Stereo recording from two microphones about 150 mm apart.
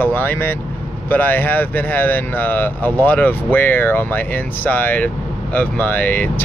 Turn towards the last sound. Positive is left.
turn(degrees=10)  # may be behind; listen again after turning